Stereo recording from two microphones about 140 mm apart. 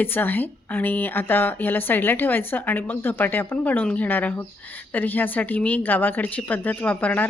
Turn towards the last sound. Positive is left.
turn(degrees=10)  # may be behind; listen again after turning